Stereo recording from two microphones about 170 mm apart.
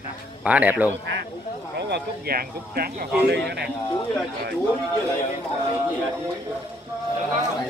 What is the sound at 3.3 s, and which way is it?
Speech, 75° right (ahead or behind).